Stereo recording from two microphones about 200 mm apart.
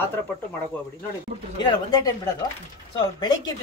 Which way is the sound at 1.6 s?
20° left (ahead or behind).